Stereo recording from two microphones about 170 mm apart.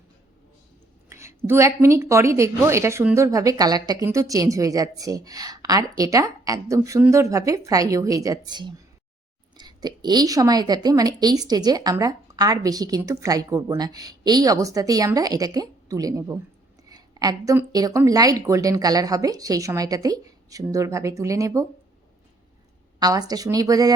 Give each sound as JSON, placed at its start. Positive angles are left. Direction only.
{"t": 1.1, "sound": "a sound", "side_deg": -15}
{"t": 1.5, "sound": "a woman's voice", "side_deg": -15}
{"t": 23.0, "sound": "a woman's voice", "side_deg": -20}